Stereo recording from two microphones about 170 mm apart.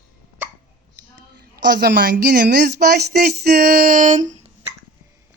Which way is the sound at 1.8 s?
75° right (ahead or behind).